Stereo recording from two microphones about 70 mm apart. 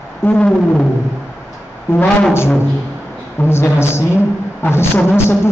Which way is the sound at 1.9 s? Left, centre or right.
Left.